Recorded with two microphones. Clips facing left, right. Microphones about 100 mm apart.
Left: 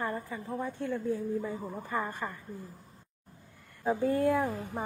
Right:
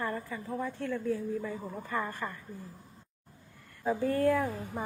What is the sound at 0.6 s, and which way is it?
A woman's voice, 15° left (ahead or behind).